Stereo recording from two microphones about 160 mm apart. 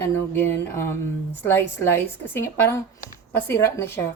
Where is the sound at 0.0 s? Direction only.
15° left (ahead or behind).